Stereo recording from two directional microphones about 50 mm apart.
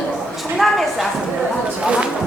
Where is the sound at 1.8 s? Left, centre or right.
Right.